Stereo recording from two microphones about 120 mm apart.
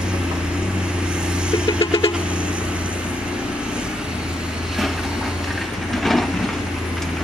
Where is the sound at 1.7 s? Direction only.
45° left (ahead or behind).